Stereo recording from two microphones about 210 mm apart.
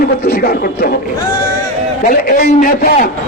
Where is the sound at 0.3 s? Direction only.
45° left (ahead or behind).